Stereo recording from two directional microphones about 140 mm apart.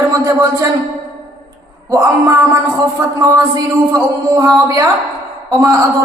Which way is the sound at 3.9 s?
25° right (ahead or behind).